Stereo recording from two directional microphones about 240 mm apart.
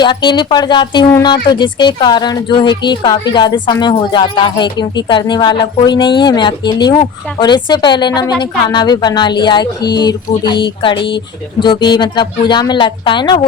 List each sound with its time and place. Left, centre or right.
0.0 s speech: centre